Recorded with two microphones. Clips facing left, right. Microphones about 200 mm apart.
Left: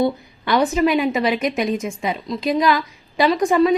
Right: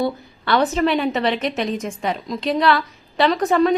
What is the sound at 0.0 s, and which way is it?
A woman's voice, 15° left (ahead or behind).